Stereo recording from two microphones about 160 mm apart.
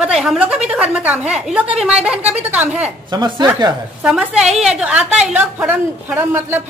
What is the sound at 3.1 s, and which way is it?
Speech, 25° right (ahead or behind).